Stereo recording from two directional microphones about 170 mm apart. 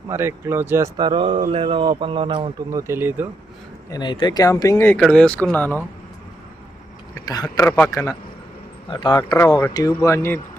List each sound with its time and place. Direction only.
0.1 s speech: 15° right (ahead or behind)
0.9 s a man's voice: 30° right (ahead or behind)
2.8 s speech: 15° right (ahead or behind)
3.8 s speech: 25° left (ahead or behind); by 5.7 s 10° left (ahead or behind)
7.3 s speech: 20° left (ahead or behind)